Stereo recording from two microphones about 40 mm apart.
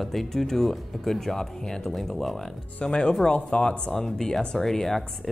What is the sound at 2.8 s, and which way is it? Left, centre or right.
Speech, left.